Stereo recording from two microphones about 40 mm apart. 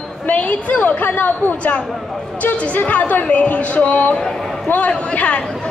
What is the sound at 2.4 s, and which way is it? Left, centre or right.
A woman's voice, left.